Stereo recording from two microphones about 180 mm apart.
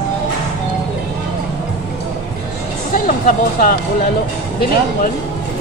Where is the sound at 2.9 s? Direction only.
50° left (ahead or behind).